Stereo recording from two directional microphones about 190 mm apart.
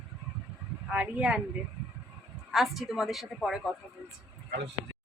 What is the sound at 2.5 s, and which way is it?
Speech, centre (ahead or behind).